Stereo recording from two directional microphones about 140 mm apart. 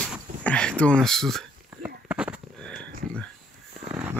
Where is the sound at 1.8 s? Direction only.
10° right (ahead or behind).